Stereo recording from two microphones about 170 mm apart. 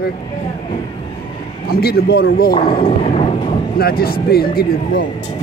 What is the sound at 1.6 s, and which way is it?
Speech, 65° left (ahead or behind).